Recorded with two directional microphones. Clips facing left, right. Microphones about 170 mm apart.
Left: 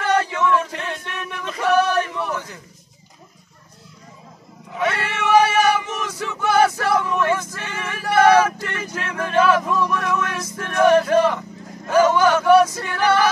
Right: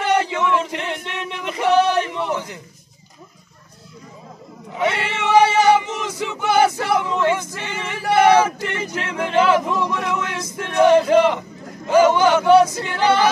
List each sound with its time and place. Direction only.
0.0 s male singing: 20° right (ahead or behind)
4.7 s male singing: 20° right (ahead or behind)
11.9 s choir: 20° right (ahead or behind)